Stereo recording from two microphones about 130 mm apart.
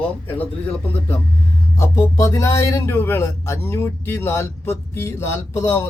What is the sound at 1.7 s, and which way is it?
A man's voice, 25° left (ahead or behind).